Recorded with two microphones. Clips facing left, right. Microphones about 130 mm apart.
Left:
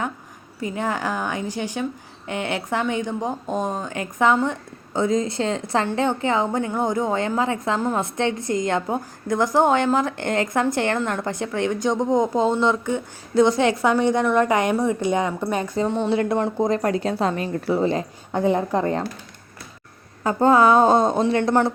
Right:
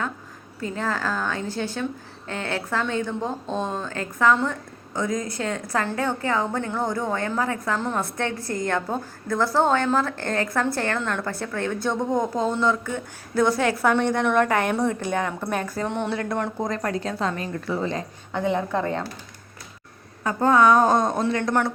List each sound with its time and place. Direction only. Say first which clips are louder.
0.6 s a woman's voice: left 2 dB; 15° left (ahead or behind)
7.8 s a woman's voice: left 3 dB; 10° left (ahead or behind); by 19.0 s 35° left (ahead or behind)
20.2 s a woman's voice: left 2 dB; 30° left (ahead or behind)